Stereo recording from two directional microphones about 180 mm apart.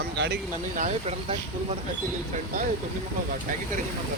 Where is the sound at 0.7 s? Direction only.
40° right (ahead or behind).